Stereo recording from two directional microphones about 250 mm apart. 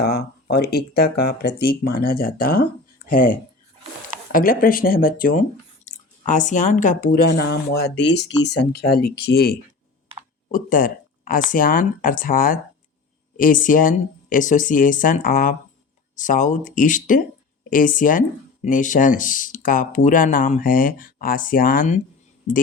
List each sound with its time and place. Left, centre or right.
0.0 s speech: left